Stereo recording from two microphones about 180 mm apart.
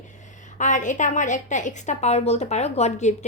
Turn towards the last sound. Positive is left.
turn(degrees=40)  # may be behind; listen again after turning